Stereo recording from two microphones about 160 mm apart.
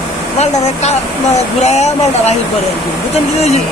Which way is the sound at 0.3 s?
45° left (ahead or behind).